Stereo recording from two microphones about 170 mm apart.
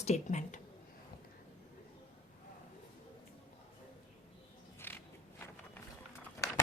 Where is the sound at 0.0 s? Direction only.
45° left (ahead or behind).